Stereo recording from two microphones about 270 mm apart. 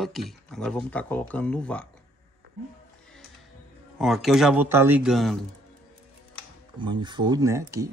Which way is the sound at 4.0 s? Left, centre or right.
Centre.